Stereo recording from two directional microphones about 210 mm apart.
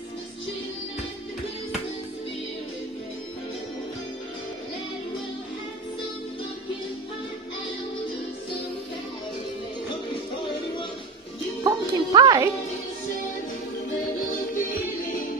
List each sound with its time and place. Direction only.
11.6 s music: 20° right (ahead or behind)
14.5 s music: 40° left (ahead or behind)